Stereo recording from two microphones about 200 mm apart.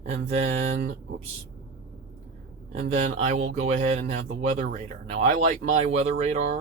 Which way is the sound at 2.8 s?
35° right (ahead or behind).